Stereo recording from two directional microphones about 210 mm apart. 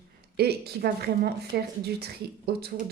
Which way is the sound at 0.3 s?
50° right (ahead or behind).